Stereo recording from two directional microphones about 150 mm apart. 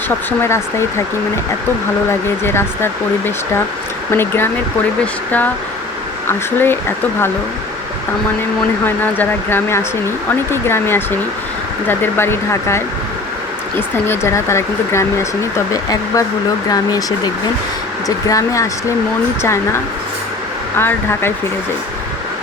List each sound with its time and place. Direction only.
0.3 s speech: 15° left (ahead or behind)
2.4 s speech: 15° left (ahead or behind)
6.2 s speech: 15° left (ahead or behind)
8.8 s speech: 15° left (ahead or behind)